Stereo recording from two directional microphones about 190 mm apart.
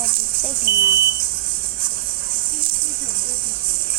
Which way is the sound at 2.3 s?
30° right (ahead or behind).